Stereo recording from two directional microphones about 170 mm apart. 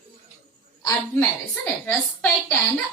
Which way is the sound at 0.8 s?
20° left (ahead or behind).